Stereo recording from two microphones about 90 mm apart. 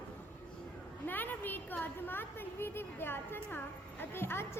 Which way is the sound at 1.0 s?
20° left (ahead or behind).